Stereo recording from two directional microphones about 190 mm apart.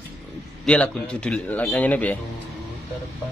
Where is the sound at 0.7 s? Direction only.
5° left (ahead or behind).